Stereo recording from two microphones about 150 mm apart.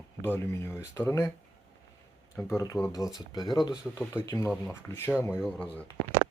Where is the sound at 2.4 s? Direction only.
20° left (ahead or behind).